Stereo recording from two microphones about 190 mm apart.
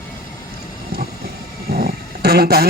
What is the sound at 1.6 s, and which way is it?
Vehicle, 55° right (ahead or behind).